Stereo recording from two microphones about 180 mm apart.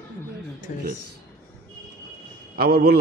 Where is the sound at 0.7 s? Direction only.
45° left (ahead or behind).